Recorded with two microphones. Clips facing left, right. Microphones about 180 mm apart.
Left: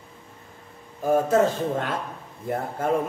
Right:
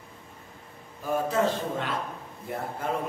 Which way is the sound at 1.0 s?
45° left (ahead or behind).